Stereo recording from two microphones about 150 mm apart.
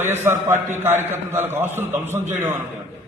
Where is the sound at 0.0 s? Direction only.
15° right (ahead or behind).